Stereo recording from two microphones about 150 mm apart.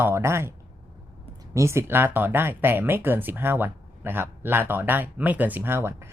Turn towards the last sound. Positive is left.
turn(degrees=-20)  # may be behind; listen again after turning